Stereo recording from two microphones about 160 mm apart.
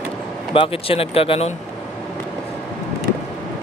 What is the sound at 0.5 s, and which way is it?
Speech, 35° left (ahead or behind).